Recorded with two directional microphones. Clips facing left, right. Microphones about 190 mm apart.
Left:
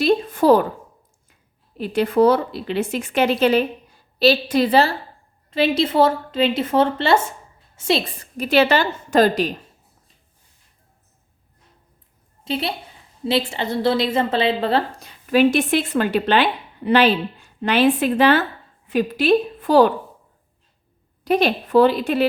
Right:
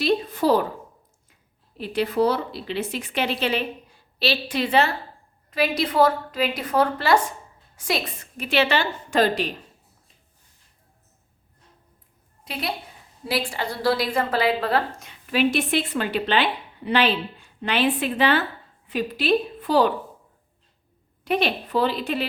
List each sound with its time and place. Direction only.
0.0 s a woman's voice: 50° left (ahead or behind)
1.8 s a woman's voice: 50° left (ahead or behind)
12.5 s a woman's voice: 30° left (ahead or behind); by 19.9 s 50° left (ahead or behind)
21.2 s a woman's voice: 45° left (ahead or behind)